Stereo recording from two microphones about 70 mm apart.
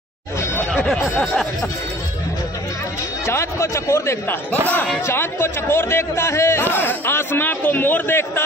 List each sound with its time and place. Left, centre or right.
3.3 s a man's voice: left
5.0 s a man's voice: left